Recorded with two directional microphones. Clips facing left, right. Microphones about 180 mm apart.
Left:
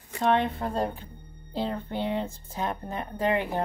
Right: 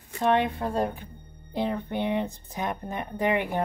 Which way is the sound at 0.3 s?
15° right (ahead or behind).